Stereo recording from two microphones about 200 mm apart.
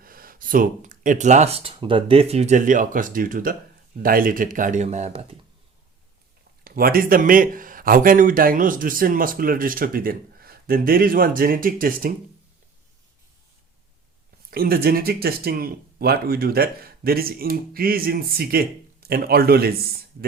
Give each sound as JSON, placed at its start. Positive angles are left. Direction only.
{"t": 0.0, "sound": "speech", "side_deg": -45}
{"t": 6.7, "sound": "speech", "side_deg": -45}
{"t": 14.5, "sound": "speech", "side_deg": -50}